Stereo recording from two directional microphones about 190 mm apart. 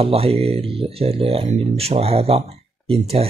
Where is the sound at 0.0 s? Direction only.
30° right (ahead or behind).